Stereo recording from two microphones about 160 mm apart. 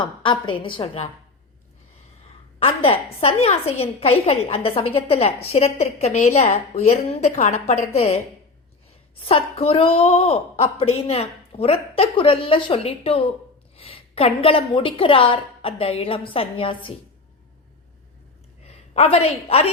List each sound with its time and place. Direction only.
0.0 s a woman's voice: 30° left (ahead or behind)
2.6 s a woman's voice: 35° left (ahead or behind)
18.9 s a woman's voice: 40° left (ahead or behind)